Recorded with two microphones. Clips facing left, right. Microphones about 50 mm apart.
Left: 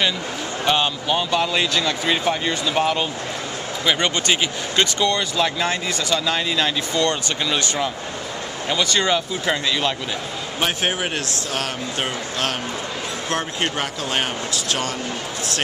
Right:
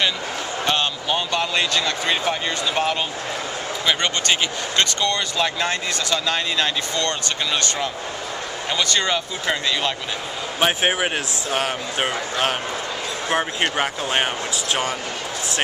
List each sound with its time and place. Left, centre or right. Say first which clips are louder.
0.7 s speech: left 3 dB; centre
7.1 s speech: left 2 dB; centre
8.6 s speech: left 2 dB; centre
10.6 s speech: right 3 dB; centre